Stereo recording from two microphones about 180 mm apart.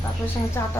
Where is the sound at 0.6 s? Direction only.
15° left (ahead or behind).